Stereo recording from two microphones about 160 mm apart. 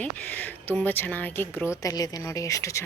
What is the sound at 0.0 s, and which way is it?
Speech, 10° left (ahead or behind).